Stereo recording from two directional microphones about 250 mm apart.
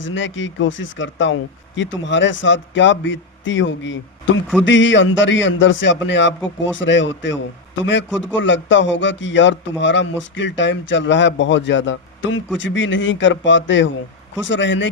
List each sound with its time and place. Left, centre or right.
0.0 s speech: left